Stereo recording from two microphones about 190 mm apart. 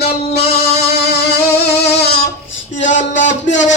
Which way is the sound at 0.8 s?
60° left (ahead or behind).